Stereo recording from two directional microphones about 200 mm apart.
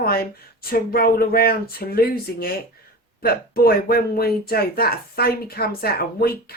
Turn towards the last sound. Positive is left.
turn(degrees=50)  # may be behind; listen again after turning